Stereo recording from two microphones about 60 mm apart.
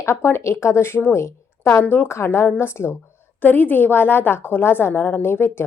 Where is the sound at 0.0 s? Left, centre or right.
Left.